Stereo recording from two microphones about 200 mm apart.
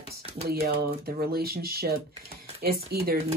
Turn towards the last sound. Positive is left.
turn(degrees=-50)  # may be behind; listen again after turning